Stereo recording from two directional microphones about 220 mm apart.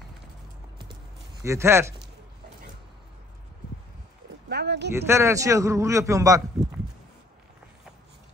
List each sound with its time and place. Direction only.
1.4 s a man's voice: 10° right (ahead or behind)
4.5 s a sound: 50° right (ahead or behind)
4.9 s a man's voice: 10° right (ahead or behind)